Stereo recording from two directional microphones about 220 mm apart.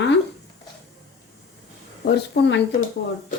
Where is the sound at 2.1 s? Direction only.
50° left (ahead or behind).